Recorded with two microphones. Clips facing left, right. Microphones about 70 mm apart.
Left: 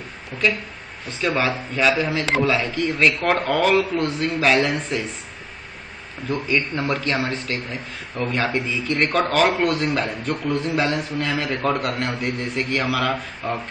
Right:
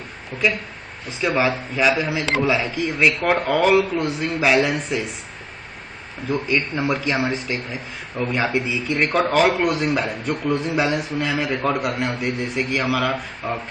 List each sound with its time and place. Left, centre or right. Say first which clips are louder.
0.3 s speech: right 1 dB; right
1.2 s speech: right 2 dB; centre
6.2 s speech: right 1 dB; centre